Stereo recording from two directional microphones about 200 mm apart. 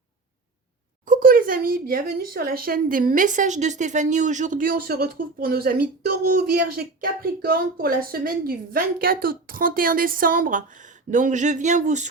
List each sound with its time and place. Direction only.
1.0 s speech: 45° right (ahead or behind)